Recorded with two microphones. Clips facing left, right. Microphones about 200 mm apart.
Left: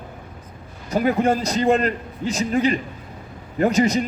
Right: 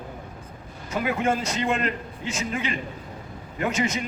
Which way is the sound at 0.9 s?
40° left (ahead or behind).